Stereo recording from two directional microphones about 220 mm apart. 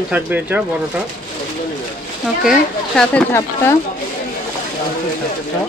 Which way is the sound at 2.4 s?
Centre (ahead or behind).